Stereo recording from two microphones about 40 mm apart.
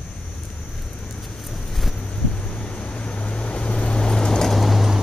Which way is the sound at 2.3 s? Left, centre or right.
Left.